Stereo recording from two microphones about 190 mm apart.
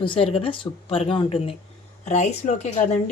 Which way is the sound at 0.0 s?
30° left (ahead or behind).